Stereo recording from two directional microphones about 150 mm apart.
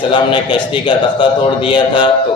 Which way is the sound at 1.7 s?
30° left (ahead or behind).